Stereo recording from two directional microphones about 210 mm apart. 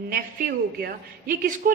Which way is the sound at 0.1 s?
45° right (ahead or behind).